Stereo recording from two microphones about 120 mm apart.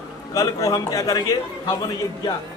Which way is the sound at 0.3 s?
30° left (ahead or behind).